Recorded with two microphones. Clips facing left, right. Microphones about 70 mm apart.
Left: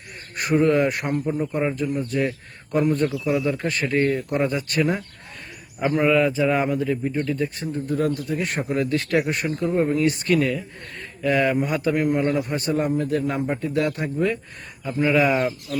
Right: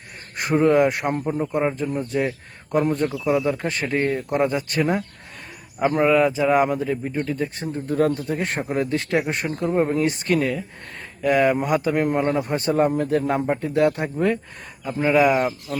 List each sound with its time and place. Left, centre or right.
0.3 s speech: right
1.3 s speech: centre
12.9 s speech: right
13.7 s speech: right